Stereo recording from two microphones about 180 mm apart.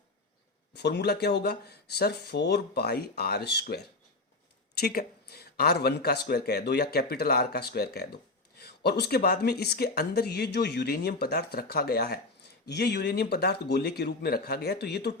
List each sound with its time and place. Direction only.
0.8 s speech: 70° left (ahead or behind)